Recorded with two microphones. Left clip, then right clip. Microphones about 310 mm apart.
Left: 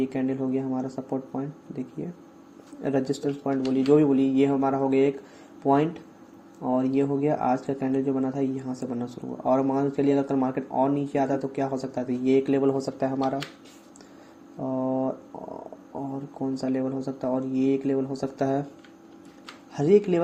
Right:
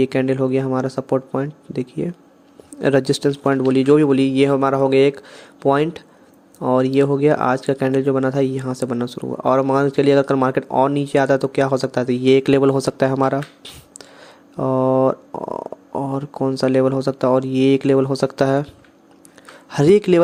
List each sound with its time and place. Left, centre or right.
0.0 s speech: right
13.1 s speech: right
14.6 s speech: right
16.1 s speech: right
19.7 s speech: right